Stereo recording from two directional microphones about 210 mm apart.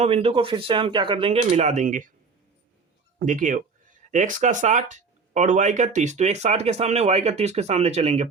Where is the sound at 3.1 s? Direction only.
40° right (ahead or behind).